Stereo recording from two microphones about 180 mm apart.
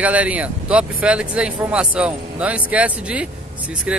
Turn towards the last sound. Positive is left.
turn(degrees=-5)  # may be behind; listen again after turning